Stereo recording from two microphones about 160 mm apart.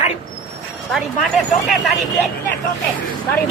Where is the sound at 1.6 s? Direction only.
Centre (ahead or behind).